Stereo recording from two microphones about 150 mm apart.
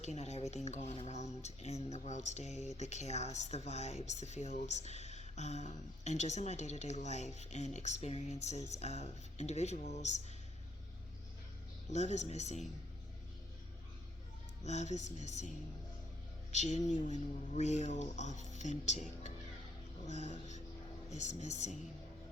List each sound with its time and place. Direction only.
0.0 s speech: 50° left (ahead or behind)
11.9 s speech: 50° left (ahead or behind)
14.6 s speech: 50° left (ahead or behind)